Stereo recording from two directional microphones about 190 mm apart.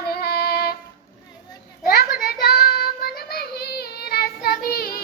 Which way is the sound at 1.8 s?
55° left (ahead or behind).